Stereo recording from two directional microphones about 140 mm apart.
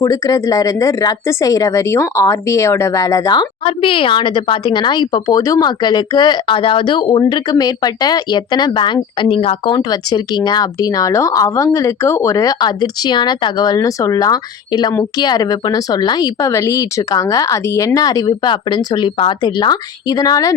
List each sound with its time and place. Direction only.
0.0 s speech: 25° left (ahead or behind); by 9.7 s 45° left (ahead or behind)
9.7 s speech: 30° left (ahead or behind)